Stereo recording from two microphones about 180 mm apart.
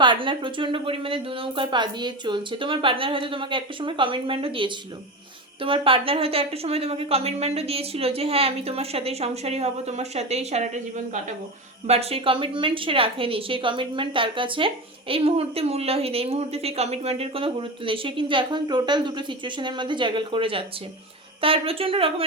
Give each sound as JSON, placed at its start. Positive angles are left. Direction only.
{"t": 0.0, "sound": "a woman's voice", "side_deg": -25}